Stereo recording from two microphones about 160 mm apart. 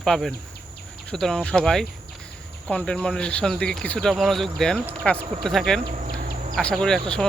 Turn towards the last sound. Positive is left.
turn(degrees=5)  # may be behind; listen again after turning